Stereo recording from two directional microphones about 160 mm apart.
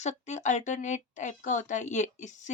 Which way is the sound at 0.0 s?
45° left (ahead or behind).